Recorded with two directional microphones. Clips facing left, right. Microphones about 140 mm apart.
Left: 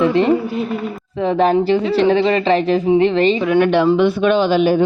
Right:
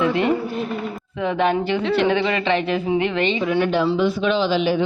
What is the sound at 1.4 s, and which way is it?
Speech, 35° left (ahead or behind).